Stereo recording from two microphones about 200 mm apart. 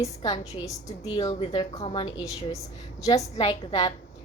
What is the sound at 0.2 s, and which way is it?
A woman's voice, 20° left (ahead or behind).